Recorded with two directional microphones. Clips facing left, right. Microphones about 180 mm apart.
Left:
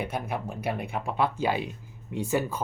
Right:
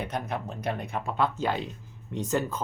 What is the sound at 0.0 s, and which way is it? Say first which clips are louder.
Speech: left 1 dB; 10° left (ahead or behind).